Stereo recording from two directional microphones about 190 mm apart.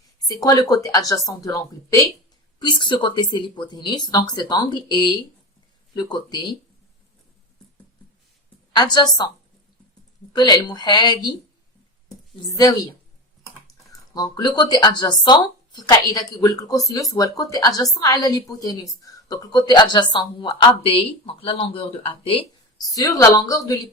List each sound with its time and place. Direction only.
0.2 s speech: 20° left (ahead or behind)
8.7 s speech: 20° left (ahead or behind)
10.3 s speech: 20° left (ahead or behind)
12.7 s speech: 20° left (ahead or behind)
14.1 s speech: 20° left (ahead or behind)
22.9 s speech: 20° left (ahead or behind)